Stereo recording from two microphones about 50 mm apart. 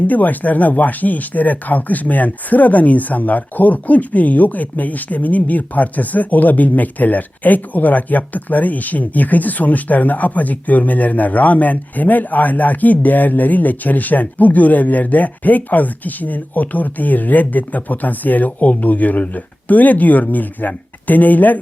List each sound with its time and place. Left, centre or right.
0.1 s speech: left